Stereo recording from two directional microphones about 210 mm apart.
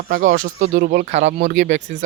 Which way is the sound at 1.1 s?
35° right (ahead or behind).